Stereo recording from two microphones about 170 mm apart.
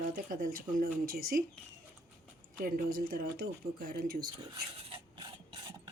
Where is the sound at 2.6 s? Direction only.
60° right (ahead or behind).